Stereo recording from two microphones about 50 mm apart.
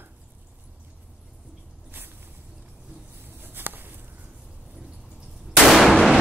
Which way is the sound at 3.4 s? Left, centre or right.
Right.